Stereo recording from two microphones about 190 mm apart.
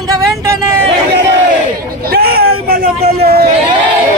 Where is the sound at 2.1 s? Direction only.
55° right (ahead or behind).